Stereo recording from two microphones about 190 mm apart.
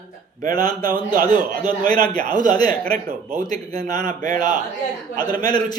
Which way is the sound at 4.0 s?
45° right (ahead or behind).